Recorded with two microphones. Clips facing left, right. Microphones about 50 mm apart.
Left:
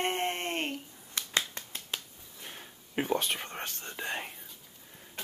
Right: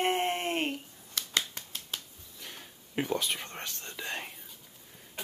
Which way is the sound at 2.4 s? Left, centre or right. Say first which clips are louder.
Even; left.